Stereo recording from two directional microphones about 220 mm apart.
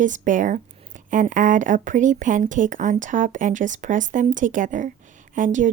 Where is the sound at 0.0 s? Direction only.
35° right (ahead or behind).